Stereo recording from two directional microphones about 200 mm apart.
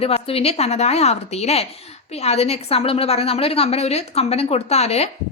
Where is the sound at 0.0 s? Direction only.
30° left (ahead or behind).